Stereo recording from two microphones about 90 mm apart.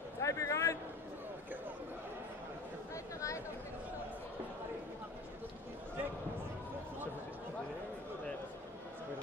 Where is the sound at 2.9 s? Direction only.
35° left (ahead or behind).